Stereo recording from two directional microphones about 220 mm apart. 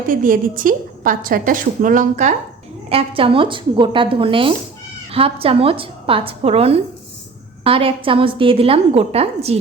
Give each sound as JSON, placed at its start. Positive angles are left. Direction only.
{"t": 0.1, "sound": "a woman's voice", "side_deg": -40}